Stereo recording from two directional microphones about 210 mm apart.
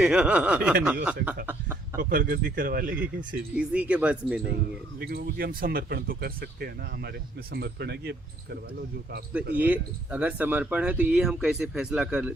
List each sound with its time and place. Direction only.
0.0 s snicker: 5° right (ahead or behind)
1.0 s speech: 10° right (ahead or behind)
1.5 s a sound: 10° right (ahead or behind)
2.0 s speech: 45° right (ahead or behind)
3.5 s snicker: 5° right (ahead or behind)
4.4 s speech: 45° right (ahead or behind)
9.6 s speech: 5° right (ahead or behind)